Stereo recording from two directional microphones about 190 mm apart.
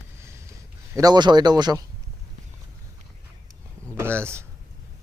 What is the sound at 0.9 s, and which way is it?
Speech, 20° right (ahead or behind).